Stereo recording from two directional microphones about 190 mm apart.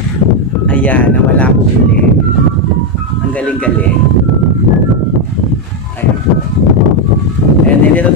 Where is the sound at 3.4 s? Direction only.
5° left (ahead or behind).